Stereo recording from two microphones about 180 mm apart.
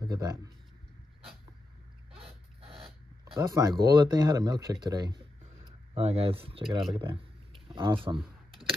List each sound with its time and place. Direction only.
0.0 s speech: 20° right (ahead or behind)
2.1 s dog: 35° right (ahead or behind)
3.3 s speech: 20° right (ahead or behind)
8.2 s a sound: centre (ahead or behind)